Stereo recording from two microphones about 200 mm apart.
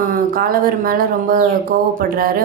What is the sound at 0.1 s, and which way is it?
Speech, 45° right (ahead or behind).